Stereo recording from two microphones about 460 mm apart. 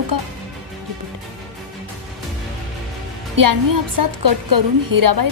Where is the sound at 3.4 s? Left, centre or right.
Right.